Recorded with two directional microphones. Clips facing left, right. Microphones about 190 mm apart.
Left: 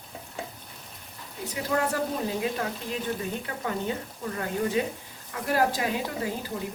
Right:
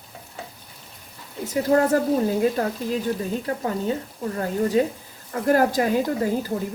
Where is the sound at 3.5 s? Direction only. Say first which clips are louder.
Right 6 dB; 35° right (ahead or behind).